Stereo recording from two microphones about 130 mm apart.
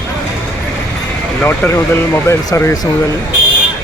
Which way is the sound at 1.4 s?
15° left (ahead or behind).